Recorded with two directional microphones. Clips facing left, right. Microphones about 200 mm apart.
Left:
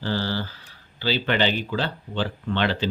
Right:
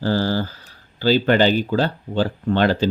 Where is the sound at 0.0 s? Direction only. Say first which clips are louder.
Right 6 dB; 45° right (ahead or behind).